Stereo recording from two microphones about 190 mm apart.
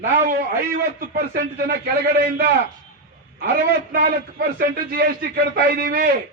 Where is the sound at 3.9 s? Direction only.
55° right (ahead or behind).